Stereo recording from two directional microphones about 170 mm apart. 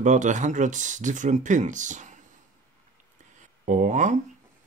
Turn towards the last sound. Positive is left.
turn(degrees=-45)  # may be behind; listen again after turning